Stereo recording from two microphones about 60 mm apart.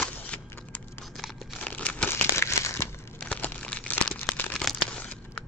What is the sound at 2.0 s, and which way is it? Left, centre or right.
Crumpling, left.